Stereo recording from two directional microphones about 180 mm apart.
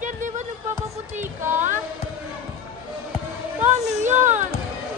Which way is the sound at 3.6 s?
40° right (ahead or behind).